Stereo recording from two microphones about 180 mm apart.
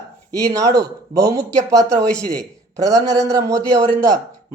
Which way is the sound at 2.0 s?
5° left (ahead or behind).